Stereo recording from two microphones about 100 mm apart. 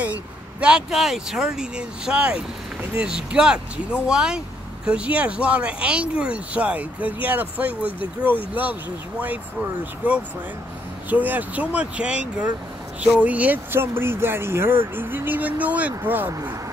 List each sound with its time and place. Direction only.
0.0 s speech: 15° right (ahead or behind)
10.0 s speech: 15° right (ahead or behind)